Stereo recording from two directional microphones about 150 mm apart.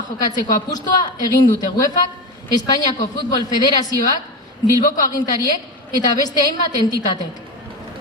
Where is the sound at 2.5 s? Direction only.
25° left (ahead or behind).